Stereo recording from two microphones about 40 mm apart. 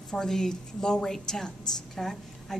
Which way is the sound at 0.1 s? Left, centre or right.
Centre.